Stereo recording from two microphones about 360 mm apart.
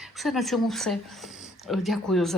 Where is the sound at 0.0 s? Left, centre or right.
Centre.